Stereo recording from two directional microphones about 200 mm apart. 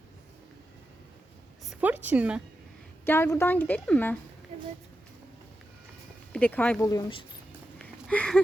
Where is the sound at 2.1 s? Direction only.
5° right (ahead or behind).